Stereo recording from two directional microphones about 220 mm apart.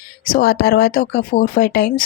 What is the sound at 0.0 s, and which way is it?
Speech, 40° left (ahead or behind).